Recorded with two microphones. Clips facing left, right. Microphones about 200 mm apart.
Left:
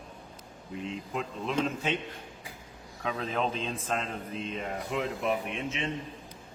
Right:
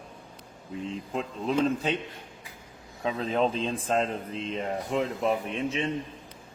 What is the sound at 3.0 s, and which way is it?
Speech, 30° right (ahead or behind).